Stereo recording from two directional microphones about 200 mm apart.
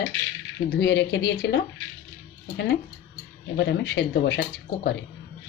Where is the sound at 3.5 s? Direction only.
60° left (ahead or behind).